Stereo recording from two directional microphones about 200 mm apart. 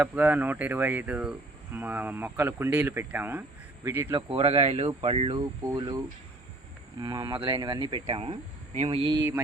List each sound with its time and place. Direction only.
0.0 s speech: 10° right (ahead or behind)
4.1 s speech: 25° right (ahead or behind)
7.0 s speech: 20° right (ahead or behind)